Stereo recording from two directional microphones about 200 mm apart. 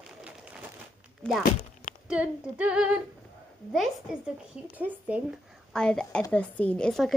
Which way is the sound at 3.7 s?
Centre (ahead or behind).